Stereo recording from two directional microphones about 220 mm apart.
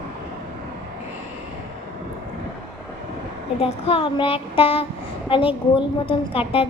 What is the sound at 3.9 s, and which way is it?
A woman's voice, 25° left (ahead or behind).